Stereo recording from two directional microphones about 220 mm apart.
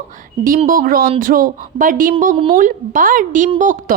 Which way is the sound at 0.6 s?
40° right (ahead or behind).